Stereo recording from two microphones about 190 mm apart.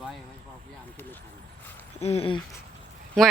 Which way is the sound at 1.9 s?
35° left (ahead or behind).